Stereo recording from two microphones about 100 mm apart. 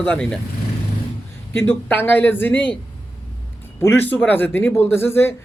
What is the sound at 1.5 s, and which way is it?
Speech, 20° left (ahead or behind).